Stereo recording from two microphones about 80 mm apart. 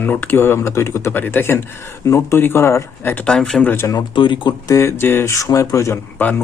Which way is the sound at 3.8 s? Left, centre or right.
Left.